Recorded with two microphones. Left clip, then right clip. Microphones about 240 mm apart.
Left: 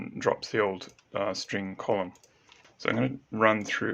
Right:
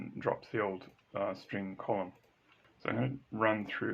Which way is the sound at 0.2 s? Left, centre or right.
Left.